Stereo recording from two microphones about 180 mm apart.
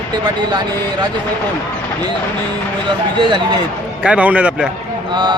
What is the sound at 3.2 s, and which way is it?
Speech, 25° right (ahead or behind).